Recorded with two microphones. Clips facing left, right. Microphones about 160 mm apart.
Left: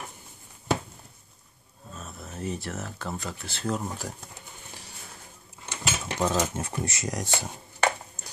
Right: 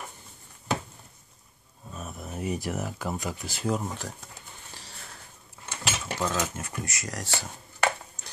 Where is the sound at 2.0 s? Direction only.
15° right (ahead or behind).